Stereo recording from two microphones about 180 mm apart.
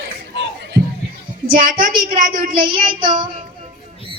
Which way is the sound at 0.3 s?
75° right (ahead or behind).